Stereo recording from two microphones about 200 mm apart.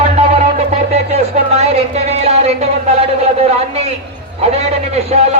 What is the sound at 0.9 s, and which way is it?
Speech, 30° right (ahead or behind).